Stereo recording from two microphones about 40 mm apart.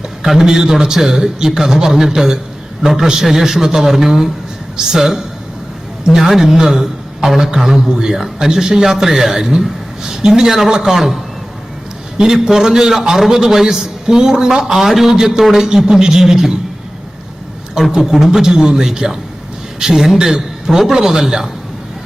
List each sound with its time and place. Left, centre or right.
0.2 s a man's voice: centre
10.9 s a man's voice: centre
17.9 s a man's voice: centre